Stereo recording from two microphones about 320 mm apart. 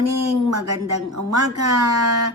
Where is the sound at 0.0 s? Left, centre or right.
Right.